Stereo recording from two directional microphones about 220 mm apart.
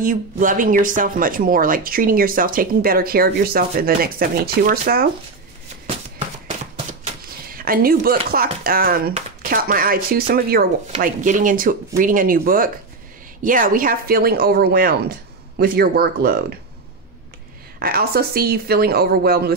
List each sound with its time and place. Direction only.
0.0 s speech: 35° right (ahead or behind)
7.5 s a woman's voice: 40° right (ahead or behind)
17.7 s a woman's voice: 45° right (ahead or behind)